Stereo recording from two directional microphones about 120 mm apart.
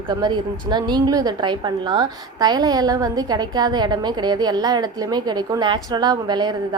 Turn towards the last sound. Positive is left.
turn(degrees=-35)  # may be behind; listen again after turning